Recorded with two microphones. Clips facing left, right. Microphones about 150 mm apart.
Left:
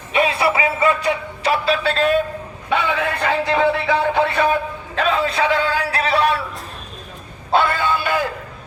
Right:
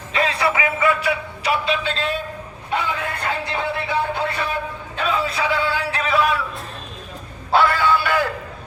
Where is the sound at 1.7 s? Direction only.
45° left (ahead or behind).